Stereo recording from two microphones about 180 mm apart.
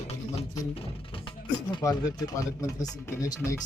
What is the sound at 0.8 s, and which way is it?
A man's voice, 30° left (ahead or behind).